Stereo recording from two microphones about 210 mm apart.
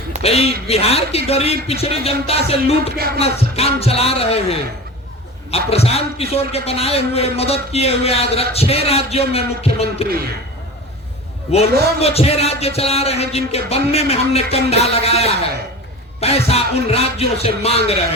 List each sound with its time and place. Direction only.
0.2 s a man's voice: 30° left (ahead or behind)
11.5 s a man's voice: 30° left (ahead or behind)